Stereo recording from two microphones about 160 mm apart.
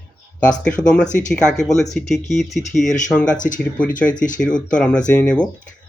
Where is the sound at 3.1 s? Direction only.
5° left (ahead or behind).